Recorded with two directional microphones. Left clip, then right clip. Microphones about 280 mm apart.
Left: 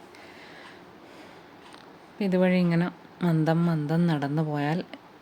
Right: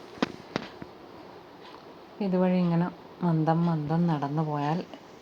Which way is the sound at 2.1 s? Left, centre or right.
Centre.